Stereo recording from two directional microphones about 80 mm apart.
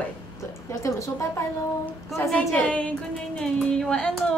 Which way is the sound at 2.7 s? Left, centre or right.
Centre.